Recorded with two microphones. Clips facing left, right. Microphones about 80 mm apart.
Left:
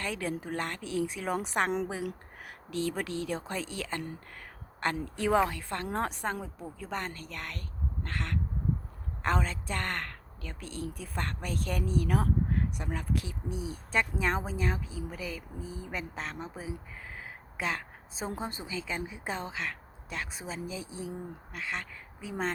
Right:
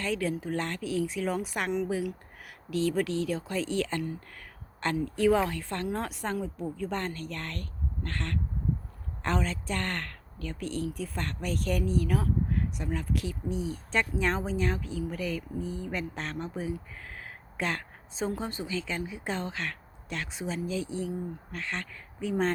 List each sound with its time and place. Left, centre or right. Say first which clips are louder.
0.0 s speech: right 4 dB; left
17.2 s a sound: right 3 dB; centre
18.2 s speech: right 4 dB; left